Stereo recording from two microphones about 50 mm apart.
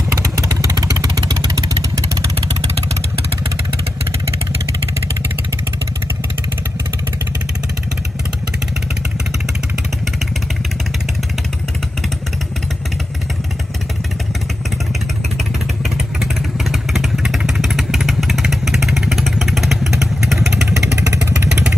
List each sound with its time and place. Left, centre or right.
0.1 s vehicle: right
16.2 s motorcycle: centre
20.8 s motorcycle: right